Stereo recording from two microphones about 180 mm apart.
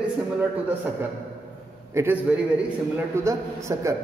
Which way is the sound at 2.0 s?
10° right (ahead or behind).